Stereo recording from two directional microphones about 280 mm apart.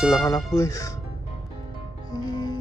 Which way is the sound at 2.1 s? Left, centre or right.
Centre.